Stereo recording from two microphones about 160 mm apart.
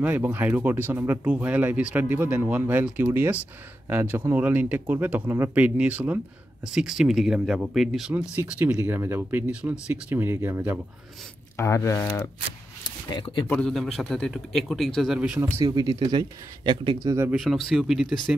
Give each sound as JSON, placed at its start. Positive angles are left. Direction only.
{"t": 0.0, "sound": "speech", "side_deg": -10}
{"t": 11.5, "sound": "speech", "side_deg": 20}
{"t": 12.8, "sound": "a sound", "side_deg": 30}
{"t": 13.5, "sound": "speech", "side_deg": 5}
{"t": 15.6, "sound": "speech", "side_deg": -25}
{"t": 17.3, "sound": "speech", "side_deg": 0}